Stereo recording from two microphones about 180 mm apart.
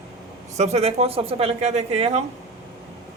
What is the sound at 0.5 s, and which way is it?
Speech, 35° right (ahead or behind).